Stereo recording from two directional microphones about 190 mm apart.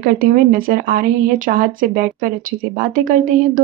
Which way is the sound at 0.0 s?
50° right (ahead or behind).